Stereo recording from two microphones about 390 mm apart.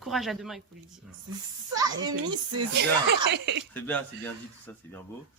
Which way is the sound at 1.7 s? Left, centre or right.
Centre.